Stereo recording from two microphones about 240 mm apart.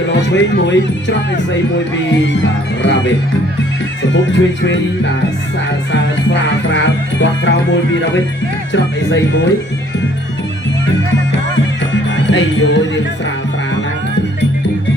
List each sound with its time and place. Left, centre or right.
0.2 s music: left
5.9 s music: left
12.2 s speech: left